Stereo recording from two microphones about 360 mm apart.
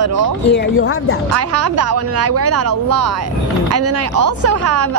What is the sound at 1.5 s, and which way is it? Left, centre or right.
A woman's voice, right.